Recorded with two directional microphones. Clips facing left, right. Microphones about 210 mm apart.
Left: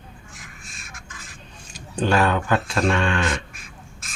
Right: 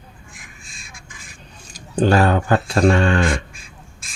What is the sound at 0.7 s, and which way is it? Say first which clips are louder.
Duck: even; 15° right (ahead or behind).